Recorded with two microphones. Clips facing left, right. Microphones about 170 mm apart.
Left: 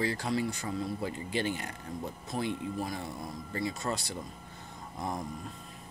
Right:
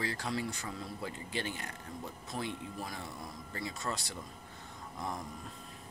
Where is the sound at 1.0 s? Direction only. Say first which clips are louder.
Left 6 dB; 10° left (ahead or behind).